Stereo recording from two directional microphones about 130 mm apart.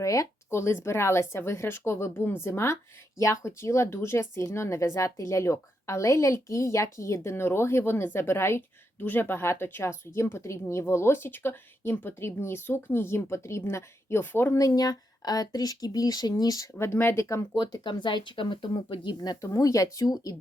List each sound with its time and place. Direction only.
0.0 s a woman's voice: 25° left (ahead or behind)
17.6 s speech: 35° left (ahead or behind)